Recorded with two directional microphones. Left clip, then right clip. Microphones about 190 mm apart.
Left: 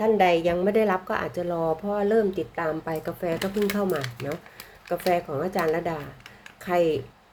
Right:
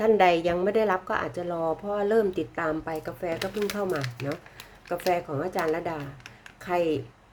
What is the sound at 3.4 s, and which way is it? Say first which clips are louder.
Speech: left 3 dB; 15° right (ahead or behind).